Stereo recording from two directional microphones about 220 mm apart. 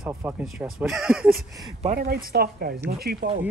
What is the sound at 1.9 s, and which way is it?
A woman's voice, 45° right (ahead or behind).